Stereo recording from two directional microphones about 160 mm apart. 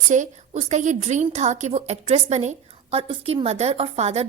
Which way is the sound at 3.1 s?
35° right (ahead or behind).